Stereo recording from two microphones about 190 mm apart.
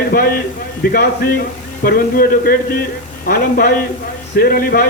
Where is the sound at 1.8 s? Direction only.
50° left (ahead or behind).